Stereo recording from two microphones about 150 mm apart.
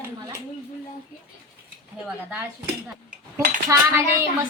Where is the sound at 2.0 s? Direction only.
10° right (ahead or behind).